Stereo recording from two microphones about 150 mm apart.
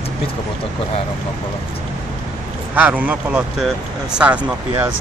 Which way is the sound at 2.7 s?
10° right (ahead or behind).